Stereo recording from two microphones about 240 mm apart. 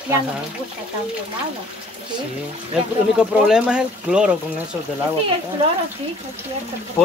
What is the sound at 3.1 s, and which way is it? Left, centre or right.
Speech, centre.